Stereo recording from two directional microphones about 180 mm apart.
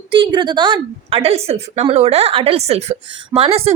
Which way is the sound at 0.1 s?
25° right (ahead or behind).